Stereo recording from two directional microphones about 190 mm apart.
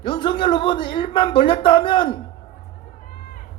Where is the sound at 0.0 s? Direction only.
25° left (ahead or behind).